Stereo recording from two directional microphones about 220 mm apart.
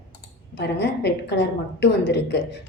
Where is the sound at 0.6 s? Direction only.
50° left (ahead or behind).